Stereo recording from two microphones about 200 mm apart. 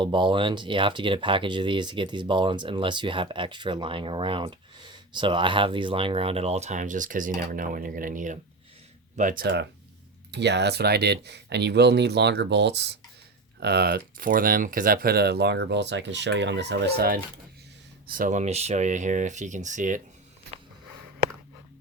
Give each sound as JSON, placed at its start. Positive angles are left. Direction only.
{"t": 0.0, "sound": "speech", "side_deg": -25}
{"t": 18.1, "sound": "speech", "side_deg": -40}